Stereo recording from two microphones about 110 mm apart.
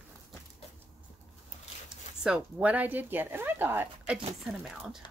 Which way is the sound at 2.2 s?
10° right (ahead or behind).